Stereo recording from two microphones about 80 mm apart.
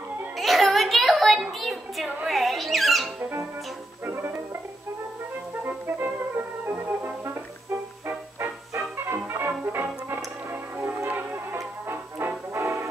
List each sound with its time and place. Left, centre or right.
0.4 s a sound: centre
2.2 s speech: centre
3.2 s music: right
5.6 s music: right
11.9 s brass instrument: right